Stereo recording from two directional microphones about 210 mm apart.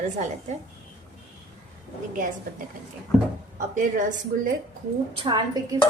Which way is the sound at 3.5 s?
40° right (ahead or behind).